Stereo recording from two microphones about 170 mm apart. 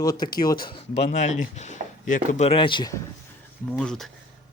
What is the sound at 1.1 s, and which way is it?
Speech, 45° left (ahead or behind).